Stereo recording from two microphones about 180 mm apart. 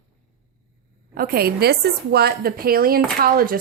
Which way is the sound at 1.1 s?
55° right (ahead or behind).